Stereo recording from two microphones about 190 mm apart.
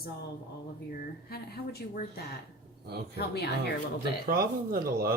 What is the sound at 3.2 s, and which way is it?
Speech, 60° left (ahead or behind).